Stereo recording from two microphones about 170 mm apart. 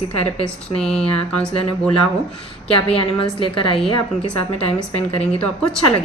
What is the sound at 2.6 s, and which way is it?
A woman's voice, 35° left (ahead or behind).